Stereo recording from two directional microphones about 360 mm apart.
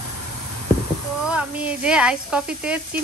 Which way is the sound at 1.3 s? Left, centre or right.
Centre.